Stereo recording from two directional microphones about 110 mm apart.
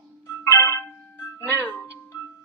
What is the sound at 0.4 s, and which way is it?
Music, 25° left (ahead or behind).